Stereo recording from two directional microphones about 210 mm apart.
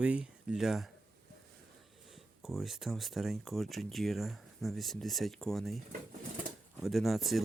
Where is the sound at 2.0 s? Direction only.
Centre (ahead or behind).